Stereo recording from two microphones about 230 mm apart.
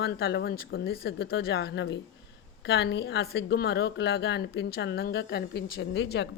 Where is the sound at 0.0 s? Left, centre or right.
Left.